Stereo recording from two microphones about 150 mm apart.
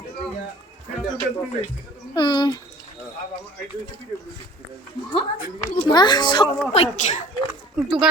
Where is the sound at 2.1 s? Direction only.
30° left (ahead or behind).